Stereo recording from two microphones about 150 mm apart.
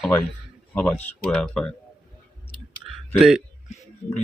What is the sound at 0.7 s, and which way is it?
Speech, 10° left (ahead or behind).